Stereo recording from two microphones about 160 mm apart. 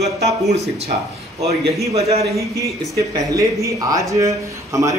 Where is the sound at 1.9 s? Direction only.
40° right (ahead or behind).